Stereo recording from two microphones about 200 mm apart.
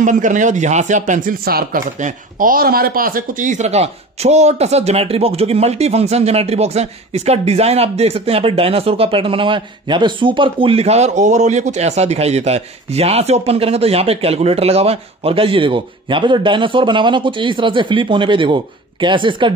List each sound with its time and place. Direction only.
0.0 s speech: 40° right (ahead or behind)